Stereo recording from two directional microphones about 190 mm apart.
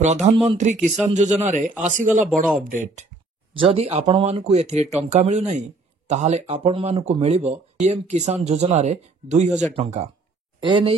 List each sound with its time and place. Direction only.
0.0 s speech: 40° right (ahead or behind)
2.2 s speech: centre (ahead or behind)
2.6 s speech: 45° right (ahead or behind)
3.5 s speech: 30° right (ahead or behind)